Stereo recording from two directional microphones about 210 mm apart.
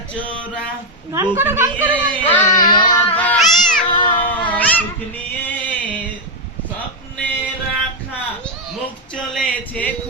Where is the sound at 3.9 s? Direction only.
25° left (ahead or behind).